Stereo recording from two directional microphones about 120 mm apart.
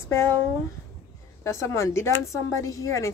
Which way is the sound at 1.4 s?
20° left (ahead or behind).